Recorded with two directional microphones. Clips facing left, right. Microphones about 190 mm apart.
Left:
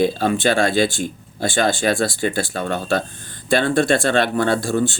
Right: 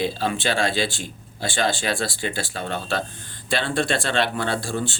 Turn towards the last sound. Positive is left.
turn(degrees=45)  # may be behind; listen again after turning